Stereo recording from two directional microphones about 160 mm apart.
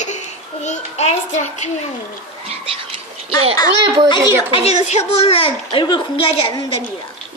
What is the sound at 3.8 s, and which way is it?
Speech, 25° right (ahead or behind).